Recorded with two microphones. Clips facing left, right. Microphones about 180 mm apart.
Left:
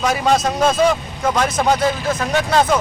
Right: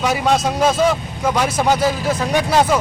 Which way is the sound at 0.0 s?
Centre (ahead or behind).